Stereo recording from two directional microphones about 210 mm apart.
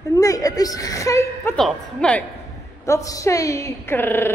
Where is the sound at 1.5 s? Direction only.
5° left (ahead or behind).